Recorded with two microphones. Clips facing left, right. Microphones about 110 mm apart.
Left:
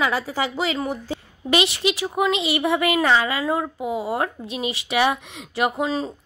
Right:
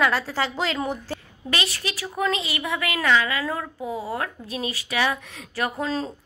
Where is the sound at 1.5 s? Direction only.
20° left (ahead or behind).